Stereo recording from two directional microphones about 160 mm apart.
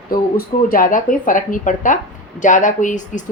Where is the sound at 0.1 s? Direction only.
60° left (ahead or behind).